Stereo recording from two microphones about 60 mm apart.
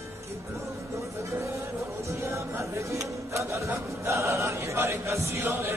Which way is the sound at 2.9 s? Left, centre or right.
Right.